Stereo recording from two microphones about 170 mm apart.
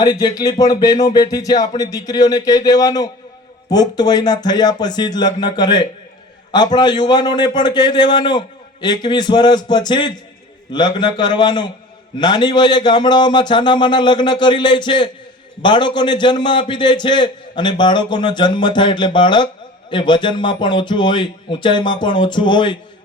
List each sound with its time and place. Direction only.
0.0 s a man's voice: 25° left (ahead or behind)